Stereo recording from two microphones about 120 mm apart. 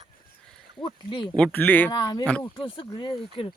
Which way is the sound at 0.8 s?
45° left (ahead or behind).